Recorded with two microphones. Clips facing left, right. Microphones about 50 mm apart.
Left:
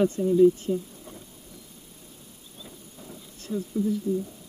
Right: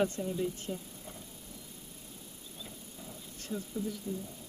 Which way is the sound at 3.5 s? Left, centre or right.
Centre.